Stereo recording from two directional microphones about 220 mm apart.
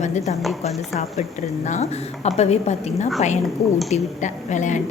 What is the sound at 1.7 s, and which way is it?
A woman's voice, 30° left (ahead or behind).